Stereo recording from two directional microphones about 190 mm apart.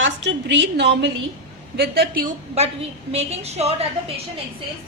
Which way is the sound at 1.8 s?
55° right (ahead or behind).